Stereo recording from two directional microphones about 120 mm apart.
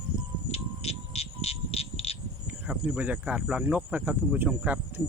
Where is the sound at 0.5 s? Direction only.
60° left (ahead or behind).